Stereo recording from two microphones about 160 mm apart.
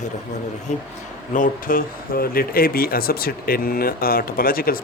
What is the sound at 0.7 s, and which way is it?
Speech, 50° left (ahead or behind).